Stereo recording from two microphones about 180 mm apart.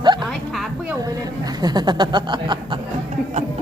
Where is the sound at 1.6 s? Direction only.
20° right (ahead or behind).